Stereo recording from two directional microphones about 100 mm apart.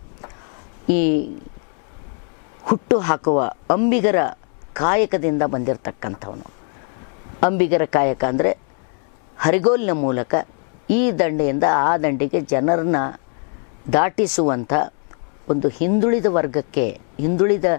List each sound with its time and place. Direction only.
0.9 s speech: 10° left (ahead or behind)
2.6 s speech: 15° left (ahead or behind)
7.3 s speech: 15° left (ahead or behind)